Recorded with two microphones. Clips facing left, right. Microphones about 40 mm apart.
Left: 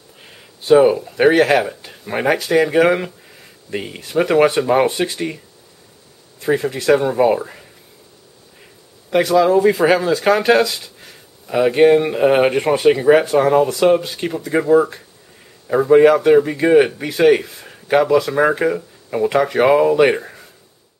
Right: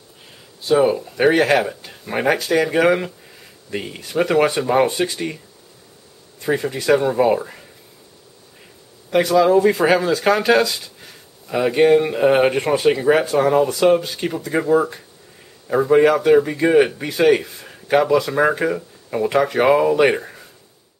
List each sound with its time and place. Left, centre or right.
0.6 s a sound: left
0.8 s speech: centre
6.4 s speech: centre
9.1 s speech: centre